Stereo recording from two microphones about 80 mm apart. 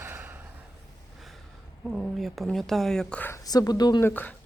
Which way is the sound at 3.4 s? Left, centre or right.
Left.